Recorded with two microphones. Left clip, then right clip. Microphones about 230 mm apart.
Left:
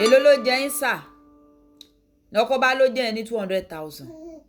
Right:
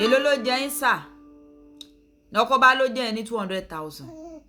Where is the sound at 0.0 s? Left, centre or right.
Centre.